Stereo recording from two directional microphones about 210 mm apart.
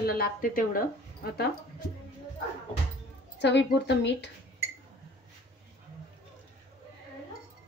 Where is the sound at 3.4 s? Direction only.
55° left (ahead or behind).